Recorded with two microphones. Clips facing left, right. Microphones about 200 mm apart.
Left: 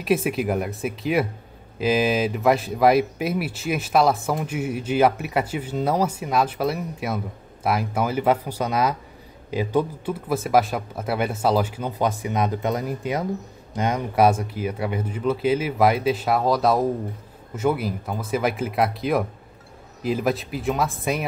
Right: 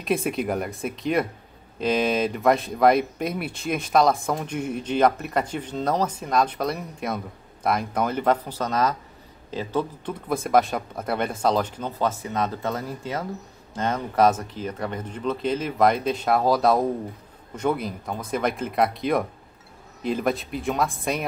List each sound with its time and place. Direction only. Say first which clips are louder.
0.0 s speech: left 3 dB; 5° left (ahead or behind)